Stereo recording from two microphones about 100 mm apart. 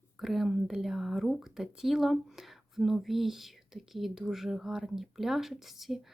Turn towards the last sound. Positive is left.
turn(degrees=0)  # may be behind; listen again after turning